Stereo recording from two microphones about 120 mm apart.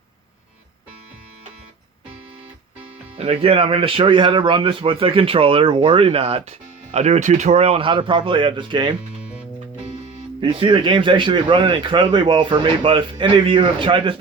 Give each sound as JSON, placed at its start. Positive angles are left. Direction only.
{"t": 3.2, "sound": "speech", "side_deg": -50}
{"t": 6.9, "sound": "speech", "side_deg": -70}
{"t": 10.4, "sound": "speech", "side_deg": -45}